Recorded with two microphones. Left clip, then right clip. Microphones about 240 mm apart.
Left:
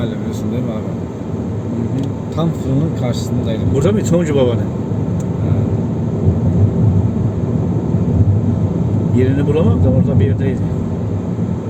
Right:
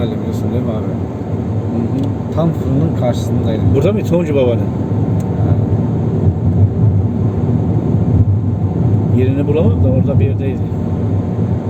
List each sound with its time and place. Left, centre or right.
3.8 s speech: centre